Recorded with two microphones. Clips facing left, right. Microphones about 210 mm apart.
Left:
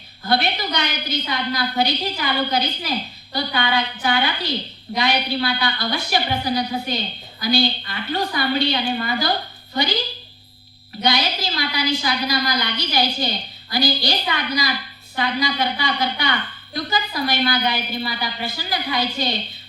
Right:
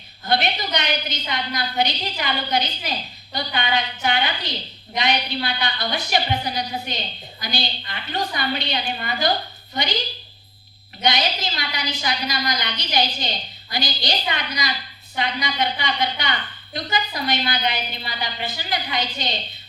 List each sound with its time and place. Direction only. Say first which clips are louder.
0.3 s a woman's voice: left 1 dB; 20° right (ahead or behind)
11.0 s a woman's voice: left 1 dB; 20° right (ahead or behind)